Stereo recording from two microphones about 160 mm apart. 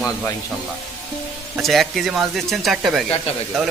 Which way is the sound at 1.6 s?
Centre (ahead or behind).